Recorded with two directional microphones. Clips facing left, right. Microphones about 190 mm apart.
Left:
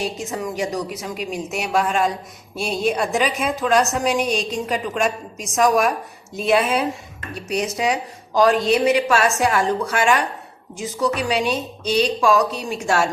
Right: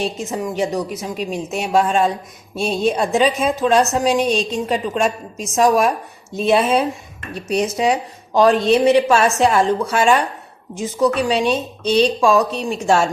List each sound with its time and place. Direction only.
0.0 s a woman's voice: 25° right (ahead or behind)
11.3 s a woman's voice: 25° right (ahead or behind)